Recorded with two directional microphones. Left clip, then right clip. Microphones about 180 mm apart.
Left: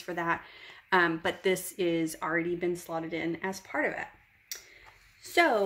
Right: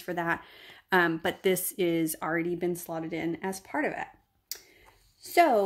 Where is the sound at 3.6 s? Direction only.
45° right (ahead or behind).